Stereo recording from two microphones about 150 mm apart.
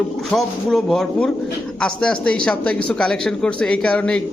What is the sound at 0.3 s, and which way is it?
Speech, centre (ahead or behind).